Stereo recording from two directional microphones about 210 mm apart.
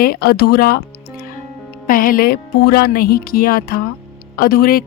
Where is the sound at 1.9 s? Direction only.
40° left (ahead or behind).